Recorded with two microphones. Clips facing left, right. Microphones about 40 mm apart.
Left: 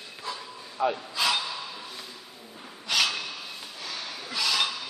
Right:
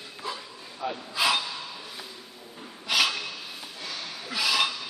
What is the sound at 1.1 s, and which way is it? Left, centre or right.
Gasp, centre.